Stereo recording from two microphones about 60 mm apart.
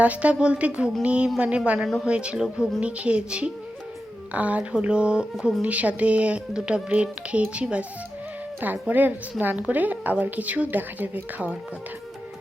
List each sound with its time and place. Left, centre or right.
0.0 s speech: right